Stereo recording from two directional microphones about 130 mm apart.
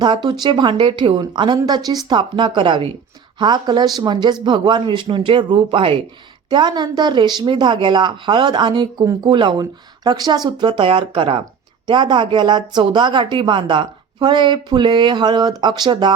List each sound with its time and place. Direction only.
0.0 s speech: 35° right (ahead or behind)